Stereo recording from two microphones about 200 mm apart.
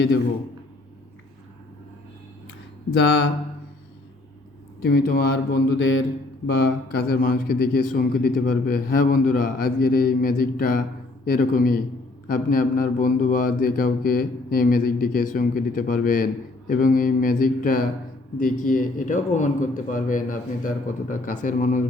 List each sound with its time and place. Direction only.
3.0 s mantra: 55° left (ahead or behind)
4.8 s mantra: 50° left (ahead or behind)
6.5 s mantra: 50° left (ahead or behind)
18.3 s a man's voice: 40° left (ahead or behind)